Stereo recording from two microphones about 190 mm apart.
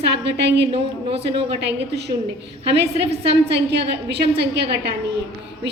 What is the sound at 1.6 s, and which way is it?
Speech, 60° right (ahead or behind).